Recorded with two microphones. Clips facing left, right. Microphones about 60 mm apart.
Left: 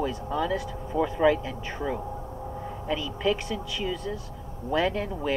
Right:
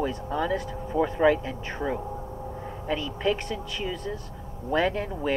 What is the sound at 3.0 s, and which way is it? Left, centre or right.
Speech, centre.